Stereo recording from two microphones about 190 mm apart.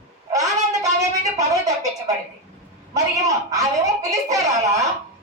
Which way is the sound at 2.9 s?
20° right (ahead or behind).